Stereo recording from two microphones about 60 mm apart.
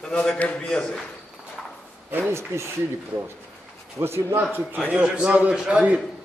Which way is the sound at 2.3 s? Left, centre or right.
Right.